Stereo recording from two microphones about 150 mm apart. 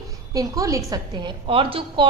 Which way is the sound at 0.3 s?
20° right (ahead or behind).